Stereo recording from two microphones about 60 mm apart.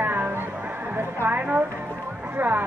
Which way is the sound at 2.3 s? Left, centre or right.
Right.